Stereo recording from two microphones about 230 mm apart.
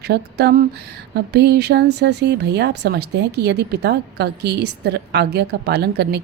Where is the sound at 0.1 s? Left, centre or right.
Right.